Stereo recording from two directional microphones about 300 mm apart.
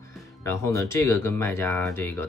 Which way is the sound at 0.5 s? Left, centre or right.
Centre.